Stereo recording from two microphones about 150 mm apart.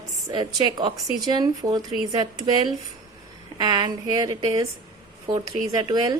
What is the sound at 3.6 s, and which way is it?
A woman's voice, 25° right (ahead or behind).